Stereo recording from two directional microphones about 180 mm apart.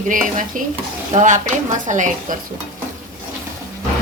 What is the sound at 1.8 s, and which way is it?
Speech, 45° right (ahead or behind).